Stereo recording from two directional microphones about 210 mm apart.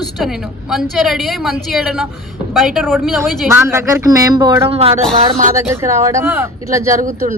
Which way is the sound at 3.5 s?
10° right (ahead or behind).